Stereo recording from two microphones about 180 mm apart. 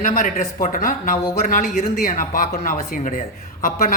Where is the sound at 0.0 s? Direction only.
50° left (ahead or behind).